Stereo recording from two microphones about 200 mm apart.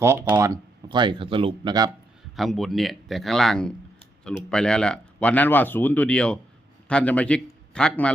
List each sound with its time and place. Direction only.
0.0 s speech: 10° right (ahead or behind)
2.3 s speech: centre (ahead or behind)